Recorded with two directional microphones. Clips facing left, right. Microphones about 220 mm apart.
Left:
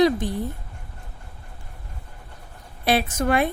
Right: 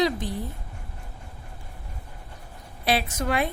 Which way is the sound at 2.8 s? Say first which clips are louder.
Left 4 dB; 50° left (ahead or behind).